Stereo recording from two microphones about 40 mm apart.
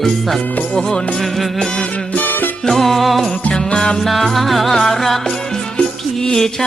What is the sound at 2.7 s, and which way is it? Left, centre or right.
Music, centre.